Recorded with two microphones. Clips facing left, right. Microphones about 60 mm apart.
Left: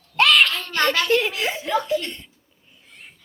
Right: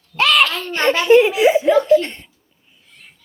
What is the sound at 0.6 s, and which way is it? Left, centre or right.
A child's voice, right.